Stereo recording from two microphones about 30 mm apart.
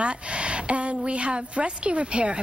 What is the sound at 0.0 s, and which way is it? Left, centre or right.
A woman's voice, right.